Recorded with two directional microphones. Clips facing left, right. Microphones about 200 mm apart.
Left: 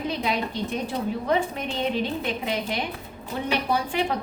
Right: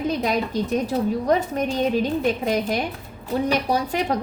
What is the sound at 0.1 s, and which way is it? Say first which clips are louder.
A woman's voice: right 4 dB; 45° right (ahead or behind).